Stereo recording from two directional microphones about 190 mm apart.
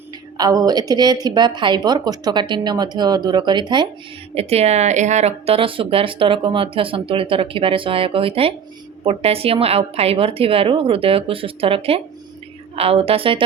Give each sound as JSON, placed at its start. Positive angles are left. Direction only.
{"t": 0.3, "sound": "a woman's voice", "side_deg": -20}